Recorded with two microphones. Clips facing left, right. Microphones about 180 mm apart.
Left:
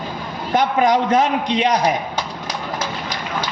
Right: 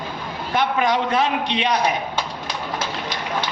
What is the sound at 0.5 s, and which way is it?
A man's voice, 45° left (ahead or behind).